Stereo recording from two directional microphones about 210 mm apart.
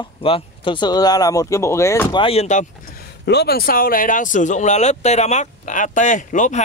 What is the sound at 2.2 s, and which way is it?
Speech, 30° left (ahead or behind).